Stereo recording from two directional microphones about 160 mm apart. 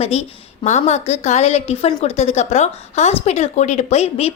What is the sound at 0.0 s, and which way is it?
A woman's voice, 40° left (ahead or behind).